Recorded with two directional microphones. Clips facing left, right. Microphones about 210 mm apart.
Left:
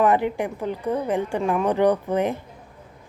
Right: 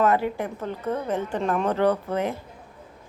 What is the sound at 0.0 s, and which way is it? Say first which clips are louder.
A woman's voice: left 2 dB; 20° left (ahead or behind).